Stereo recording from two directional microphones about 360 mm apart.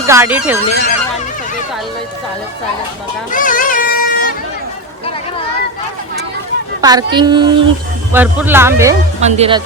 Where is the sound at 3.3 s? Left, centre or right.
Left.